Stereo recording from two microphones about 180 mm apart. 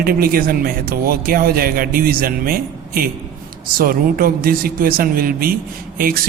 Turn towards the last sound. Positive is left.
turn(degrees=-55)  # may be behind; listen again after turning